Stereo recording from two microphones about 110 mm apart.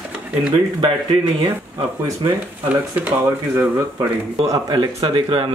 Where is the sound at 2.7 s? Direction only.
15° right (ahead or behind).